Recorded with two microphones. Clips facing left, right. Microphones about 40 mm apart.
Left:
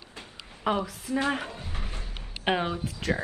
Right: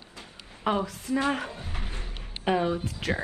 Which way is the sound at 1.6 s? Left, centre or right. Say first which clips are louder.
Right 1 dB; right.